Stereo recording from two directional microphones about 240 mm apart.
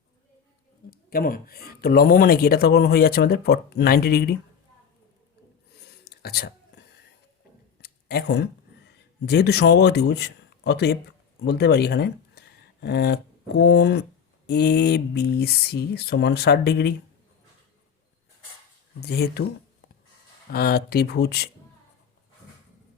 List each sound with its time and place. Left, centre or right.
0.9 s speech: left
5.7 s whispering: left
7.8 s a sound: left
9.2 s speech: left
18.9 s speech: left
20.5 s speech: left